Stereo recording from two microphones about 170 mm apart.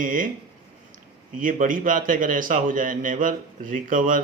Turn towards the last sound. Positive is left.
turn(degrees=-50)  # may be behind; listen again after turning